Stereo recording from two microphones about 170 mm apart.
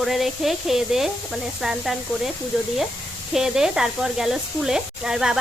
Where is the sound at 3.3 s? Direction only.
5° right (ahead or behind).